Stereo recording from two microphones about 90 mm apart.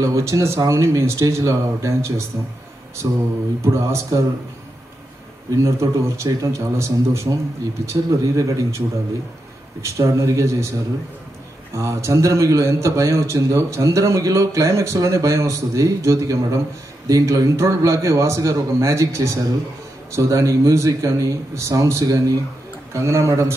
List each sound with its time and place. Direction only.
0.0 s a man's voice: 35° right (ahead or behind)
5.6 s a man's voice: 35° right (ahead or behind)
11.7 s a man's voice: 35° right (ahead or behind)